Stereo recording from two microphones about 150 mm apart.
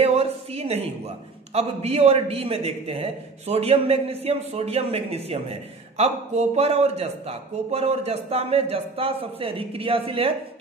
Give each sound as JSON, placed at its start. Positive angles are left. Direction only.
{"t": 0.0, "sound": "a man's voice", "side_deg": -40}